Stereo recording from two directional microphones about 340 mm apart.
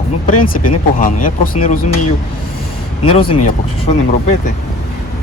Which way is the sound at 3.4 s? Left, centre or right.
Left.